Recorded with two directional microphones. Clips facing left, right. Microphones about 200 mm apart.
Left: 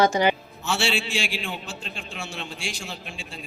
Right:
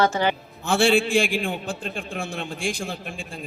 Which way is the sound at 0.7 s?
55° right (ahead or behind).